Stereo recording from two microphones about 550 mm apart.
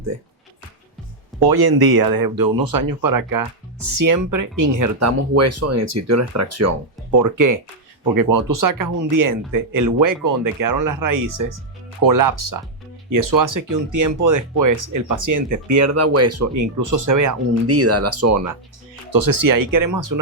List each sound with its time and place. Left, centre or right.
1.5 s speech: right